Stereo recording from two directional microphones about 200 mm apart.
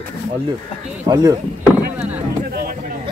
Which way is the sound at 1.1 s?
20° right (ahead or behind).